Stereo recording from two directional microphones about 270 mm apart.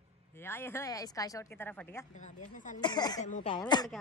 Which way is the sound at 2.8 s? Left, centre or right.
Centre.